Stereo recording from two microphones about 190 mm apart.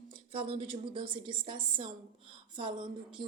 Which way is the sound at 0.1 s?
30° right (ahead or behind).